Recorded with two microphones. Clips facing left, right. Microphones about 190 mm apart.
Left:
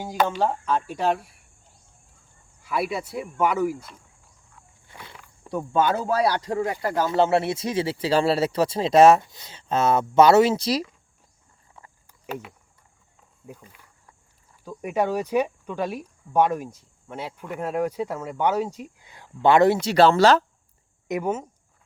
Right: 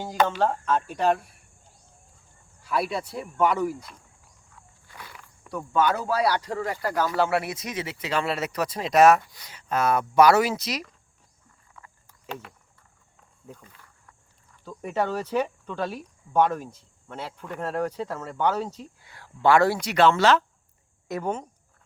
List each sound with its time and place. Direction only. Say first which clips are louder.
0.0 s speech: even; 10° left (ahead or behind)
2.6 s speech: even; centre (ahead or behind)
4.9 s wild animals: left 1 dB; 25° left (ahead or behind)
5.4 s speech: left 2 dB; 25° left (ahead or behind)
11.8 s cricket: left 1 dB; 30° left (ahead or behind)
12.3 s speech: left 4 dB; 5° left (ahead or behind)
13.5 s wild animals: left 2 dB; 10° left (ahead or behind)
14.6 s speech: left 3 dB; 10° left (ahead or behind); by 20.4 s 35° left (ahead or behind)
21.1 s speech: left 3 dB; 10° left (ahead or behind)